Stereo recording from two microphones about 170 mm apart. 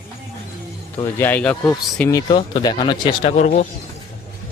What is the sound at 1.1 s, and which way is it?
Speech, 10° left (ahead or behind).